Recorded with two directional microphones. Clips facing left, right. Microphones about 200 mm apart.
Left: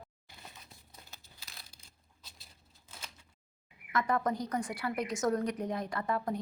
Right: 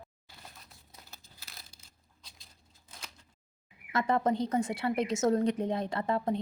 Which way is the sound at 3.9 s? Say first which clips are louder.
Right 3 dB; 25° right (ahead or behind).